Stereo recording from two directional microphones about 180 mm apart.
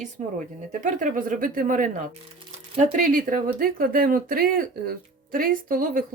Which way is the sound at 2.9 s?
50° right (ahead or behind).